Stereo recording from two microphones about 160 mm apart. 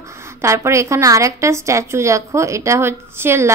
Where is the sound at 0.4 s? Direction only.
20° right (ahead or behind).